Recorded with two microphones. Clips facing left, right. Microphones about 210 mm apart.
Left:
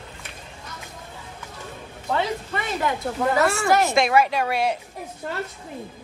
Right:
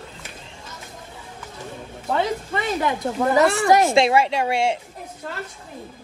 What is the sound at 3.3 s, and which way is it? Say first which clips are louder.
Speech: right 5 dB; 15° right (ahead or behind).